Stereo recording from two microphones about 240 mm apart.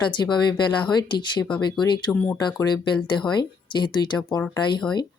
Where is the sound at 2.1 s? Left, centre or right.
Centre.